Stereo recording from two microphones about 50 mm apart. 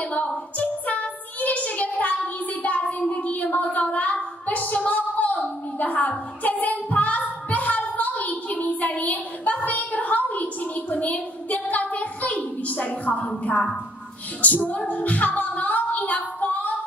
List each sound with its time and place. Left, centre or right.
0.0 s a sound: left
13.4 s a woman's voice: left
14.4 s music: left